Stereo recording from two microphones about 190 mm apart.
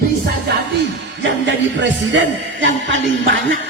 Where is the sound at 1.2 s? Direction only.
70° right (ahead or behind).